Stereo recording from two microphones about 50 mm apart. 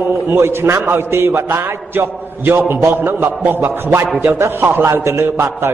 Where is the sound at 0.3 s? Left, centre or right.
Right.